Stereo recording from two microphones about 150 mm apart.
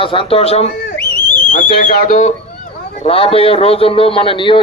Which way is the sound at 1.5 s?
70° left (ahead or behind).